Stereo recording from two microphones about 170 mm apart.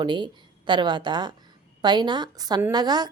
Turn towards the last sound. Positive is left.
turn(degrees=-25)  # may be behind; listen again after turning